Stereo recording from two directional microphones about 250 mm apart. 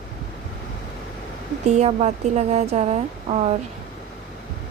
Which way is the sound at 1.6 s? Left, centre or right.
Right.